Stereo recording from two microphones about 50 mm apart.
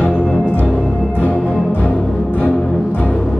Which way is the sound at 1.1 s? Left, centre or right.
Left.